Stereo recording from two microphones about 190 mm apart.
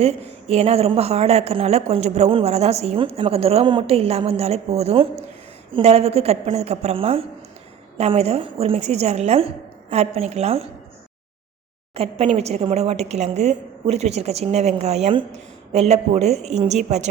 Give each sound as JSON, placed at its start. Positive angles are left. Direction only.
{"t": 0.0, "sound": "a woman's voice", "side_deg": -35}
{"t": 11.9, "sound": "a woman's voice", "side_deg": -30}